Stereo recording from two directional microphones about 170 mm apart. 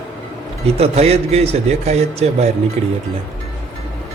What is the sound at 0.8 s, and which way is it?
A man's voice, 35° right (ahead or behind).